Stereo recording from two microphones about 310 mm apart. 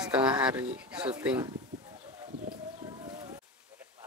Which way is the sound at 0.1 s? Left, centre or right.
Centre.